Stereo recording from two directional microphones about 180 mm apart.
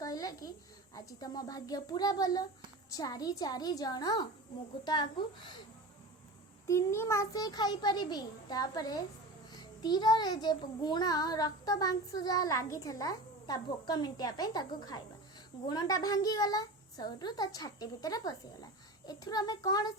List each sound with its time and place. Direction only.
0.0 s a sound: 20° left (ahead or behind)
0.9 s a child's voice: 20° left (ahead or behind)
6.7 s a child's voice: 15° left (ahead or behind)